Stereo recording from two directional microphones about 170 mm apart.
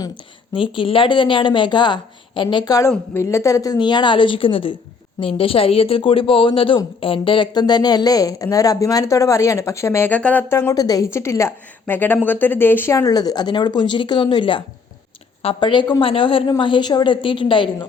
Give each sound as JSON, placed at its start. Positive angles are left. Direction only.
{"t": 0.5, "sound": "a woman's voice", "side_deg": 30}